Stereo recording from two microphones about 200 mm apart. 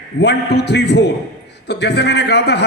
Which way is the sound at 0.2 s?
55° left (ahead or behind).